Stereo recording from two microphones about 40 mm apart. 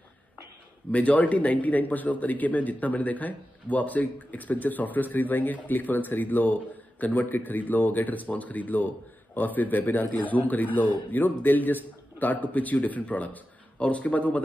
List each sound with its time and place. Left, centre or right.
0.9 s a man's voice: left